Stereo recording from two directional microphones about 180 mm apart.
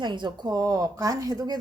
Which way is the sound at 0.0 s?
25° right (ahead or behind).